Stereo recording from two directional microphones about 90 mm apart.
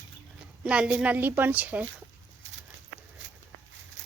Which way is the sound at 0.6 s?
10° right (ahead or behind).